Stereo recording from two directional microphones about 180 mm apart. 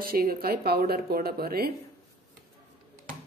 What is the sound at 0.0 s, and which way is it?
Speech, 55° right (ahead or behind).